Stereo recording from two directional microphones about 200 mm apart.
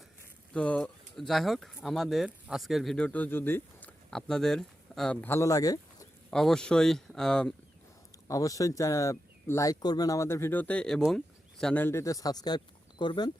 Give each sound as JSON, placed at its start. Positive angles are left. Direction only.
{"t": 0.5, "sound": "a sound", "side_deg": 5}
{"t": 1.3, "sound": "speech", "side_deg": 0}
{"t": 6.3, "sound": "speech", "side_deg": 5}
{"t": 8.3, "sound": "speech", "side_deg": 15}